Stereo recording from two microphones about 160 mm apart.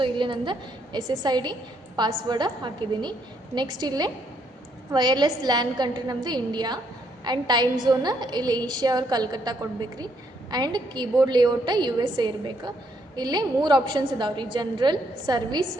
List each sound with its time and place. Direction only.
0.0 s a woman's voice: 30° right (ahead or behind)